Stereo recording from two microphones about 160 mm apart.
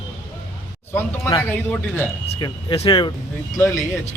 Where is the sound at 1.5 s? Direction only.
10° left (ahead or behind).